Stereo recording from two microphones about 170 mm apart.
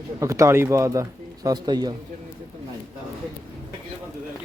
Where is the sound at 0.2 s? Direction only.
15° right (ahead or behind).